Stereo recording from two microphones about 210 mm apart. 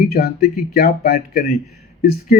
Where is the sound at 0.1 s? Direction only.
50° left (ahead or behind).